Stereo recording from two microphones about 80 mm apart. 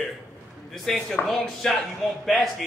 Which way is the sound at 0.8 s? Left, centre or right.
Centre.